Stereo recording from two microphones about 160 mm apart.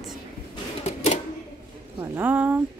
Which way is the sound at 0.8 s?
45° left (ahead or behind).